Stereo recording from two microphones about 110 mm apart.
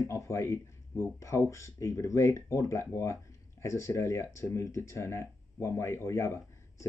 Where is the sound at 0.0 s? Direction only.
25° left (ahead or behind).